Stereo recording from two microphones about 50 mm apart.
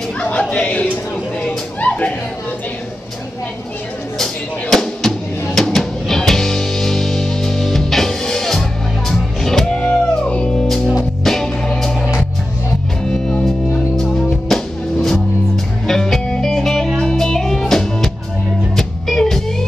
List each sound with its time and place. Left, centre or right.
0.2 s a sound: left
1.8 s music: left
4.2 s drum: centre
9.8 s music: centre
13.1 s music: centre